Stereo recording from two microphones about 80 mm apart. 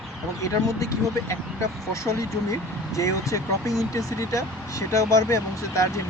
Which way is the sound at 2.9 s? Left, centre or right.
Left.